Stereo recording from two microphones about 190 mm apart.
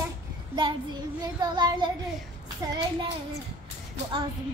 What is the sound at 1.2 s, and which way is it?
Child singing, 20° right (ahead or behind).